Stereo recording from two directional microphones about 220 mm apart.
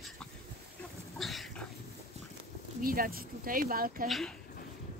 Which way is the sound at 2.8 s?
40° right (ahead or behind).